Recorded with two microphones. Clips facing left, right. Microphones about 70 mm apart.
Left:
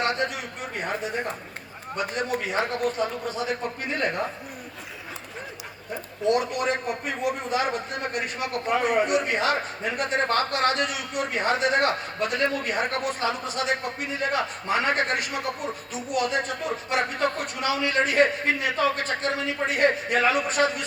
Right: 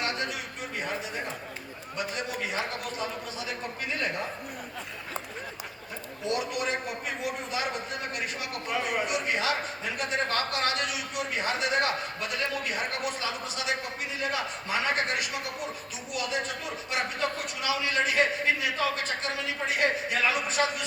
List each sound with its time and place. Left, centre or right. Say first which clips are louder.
0.0 s a sound: left 6 dB; left
0.8 s a man's voice: left 5 dB; left
6.2 s a man's voice: left 7 dB; left